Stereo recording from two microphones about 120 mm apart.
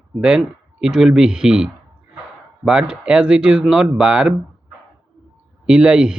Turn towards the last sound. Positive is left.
turn(degrees=-5)  # may be behind; listen again after turning